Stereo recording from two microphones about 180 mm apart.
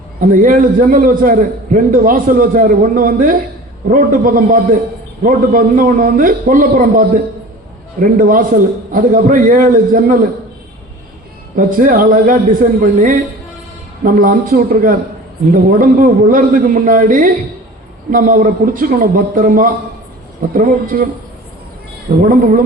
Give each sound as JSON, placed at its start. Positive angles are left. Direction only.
{"t": 0.2, "sound": "a man's voice", "side_deg": -50}
{"t": 8.1, "sound": "a man's voice", "side_deg": -50}
{"t": 11.5, "sound": "a man's voice", "side_deg": -55}
{"t": 22.2, "sound": "a man's voice", "side_deg": -50}